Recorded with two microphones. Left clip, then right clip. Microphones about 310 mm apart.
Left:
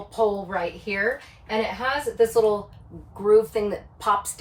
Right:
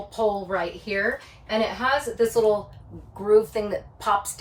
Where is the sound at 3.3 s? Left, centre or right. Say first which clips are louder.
Left 1 dB; centre.